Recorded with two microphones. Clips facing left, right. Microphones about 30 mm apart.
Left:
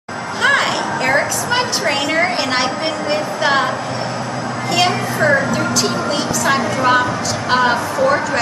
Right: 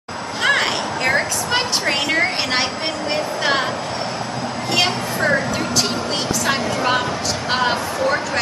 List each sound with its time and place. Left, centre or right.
0.4 s a sound: centre
3.1 s speech: centre
4.7 s a woman's voice: centre
6.4 s a woman's voice: centre